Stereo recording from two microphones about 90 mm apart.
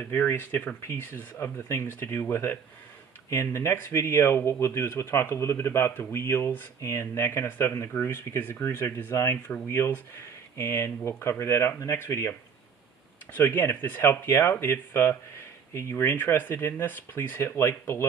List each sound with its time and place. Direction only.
0.1 s speech: 20° left (ahead or behind)